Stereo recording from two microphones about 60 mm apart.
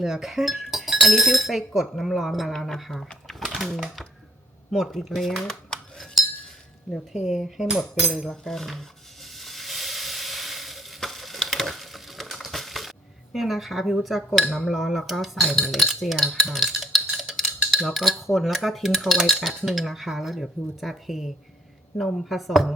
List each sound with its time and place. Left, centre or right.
0.0 s speech: centre
3.2 s a sound: centre
4.7 s speech: centre
5.5 s a sound: centre
6.9 s speech: centre
7.9 s sizzle: centre
13.3 s speech: centre